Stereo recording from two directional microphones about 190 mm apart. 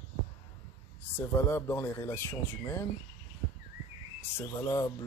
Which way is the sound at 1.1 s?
10° left (ahead or behind).